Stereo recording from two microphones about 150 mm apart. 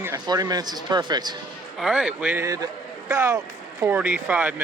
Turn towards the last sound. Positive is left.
turn(degrees=-10)  # may be behind; listen again after turning